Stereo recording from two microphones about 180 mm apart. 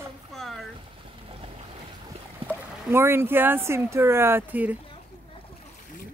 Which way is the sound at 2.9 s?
15° right (ahead or behind).